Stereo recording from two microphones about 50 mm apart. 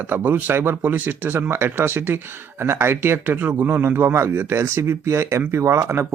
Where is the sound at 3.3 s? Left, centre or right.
Right.